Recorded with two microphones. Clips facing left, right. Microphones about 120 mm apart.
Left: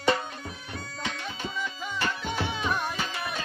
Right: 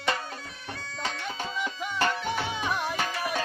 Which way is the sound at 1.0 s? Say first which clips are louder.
Right 3 dB; 40° right (ahead or behind).